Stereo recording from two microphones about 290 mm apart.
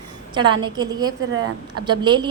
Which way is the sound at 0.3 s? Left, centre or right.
Centre.